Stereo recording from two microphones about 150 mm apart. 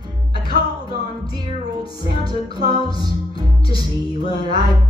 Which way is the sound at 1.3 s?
25° right (ahead or behind).